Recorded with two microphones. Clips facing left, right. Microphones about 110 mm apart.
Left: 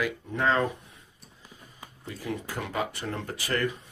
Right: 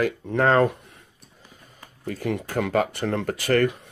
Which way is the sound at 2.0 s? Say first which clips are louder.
Right 7 dB; 65° right (ahead or behind).